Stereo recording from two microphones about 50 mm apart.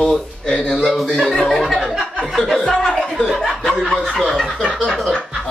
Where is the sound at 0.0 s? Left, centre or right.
Centre.